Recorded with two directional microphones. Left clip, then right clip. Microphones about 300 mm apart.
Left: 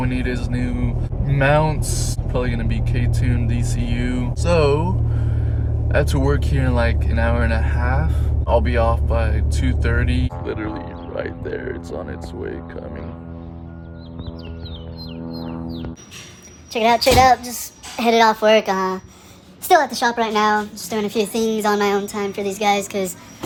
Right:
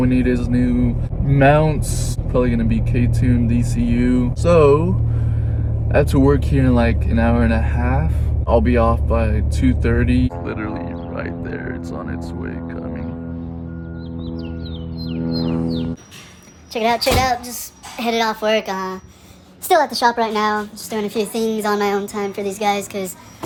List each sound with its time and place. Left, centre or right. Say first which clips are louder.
0.0 s speech: right 6 dB; centre
6.2 s speech: right 5 dB; centre
15.1 s music: right 9 dB; right
16.7 s speech: left 3 dB; centre